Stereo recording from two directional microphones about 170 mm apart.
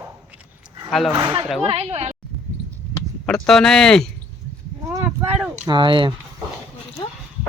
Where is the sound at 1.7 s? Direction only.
35° right (ahead or behind).